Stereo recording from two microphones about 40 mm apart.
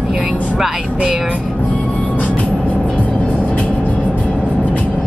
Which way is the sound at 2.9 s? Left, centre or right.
Left.